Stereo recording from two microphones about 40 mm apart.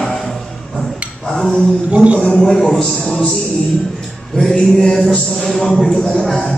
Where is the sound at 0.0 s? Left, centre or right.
Centre.